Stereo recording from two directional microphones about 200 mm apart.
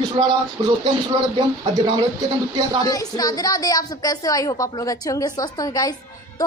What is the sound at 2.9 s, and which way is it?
A woman's voice, 20° left (ahead or behind).